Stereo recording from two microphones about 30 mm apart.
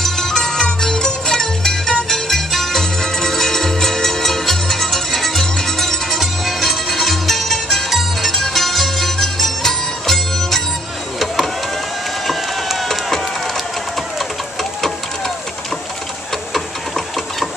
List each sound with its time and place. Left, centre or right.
0.0 s music: centre
2.8 s music: centre
6.1 s music: centre
12.3 s a sound: centre
14.1 s vehicle: centre
16.5 s sewing machine: centre